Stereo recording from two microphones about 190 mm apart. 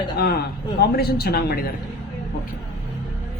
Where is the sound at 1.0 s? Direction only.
55° left (ahead or behind).